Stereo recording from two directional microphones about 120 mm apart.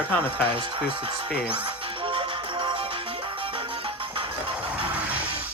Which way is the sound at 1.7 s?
45° right (ahead or behind).